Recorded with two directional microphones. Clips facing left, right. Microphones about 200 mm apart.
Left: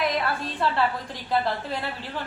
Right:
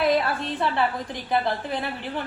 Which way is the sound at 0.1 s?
25° right (ahead or behind).